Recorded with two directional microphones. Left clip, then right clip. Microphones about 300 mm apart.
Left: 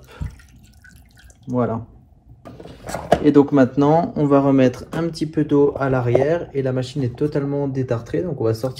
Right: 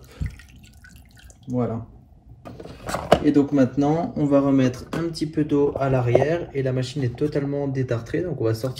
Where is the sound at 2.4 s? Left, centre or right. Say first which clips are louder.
Even; centre.